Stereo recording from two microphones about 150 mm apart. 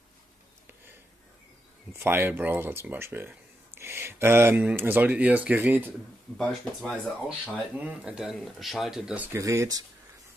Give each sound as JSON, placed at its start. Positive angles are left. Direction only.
{"t": 2.0, "sound": "speech", "side_deg": -15}
{"t": 6.3, "sound": "speech", "side_deg": 5}
{"t": 9.4, "sound": "speech", "side_deg": -20}